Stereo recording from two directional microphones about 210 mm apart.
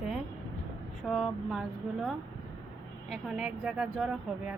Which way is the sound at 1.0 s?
Centre (ahead or behind).